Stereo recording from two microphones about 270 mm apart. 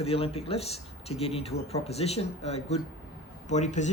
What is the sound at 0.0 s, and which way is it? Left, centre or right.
Speech, left.